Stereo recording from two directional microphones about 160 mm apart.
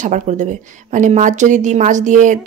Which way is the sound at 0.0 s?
50° right (ahead or behind).